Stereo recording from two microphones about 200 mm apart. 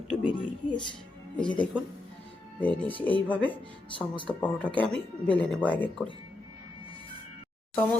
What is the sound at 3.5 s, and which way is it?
Speech, 25° left (ahead or behind).